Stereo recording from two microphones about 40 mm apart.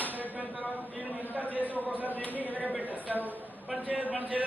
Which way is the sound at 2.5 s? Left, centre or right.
Left.